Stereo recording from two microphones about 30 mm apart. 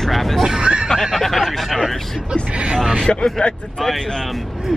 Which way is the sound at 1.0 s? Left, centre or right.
Centre.